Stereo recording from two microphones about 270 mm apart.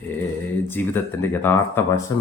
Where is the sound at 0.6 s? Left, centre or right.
Centre.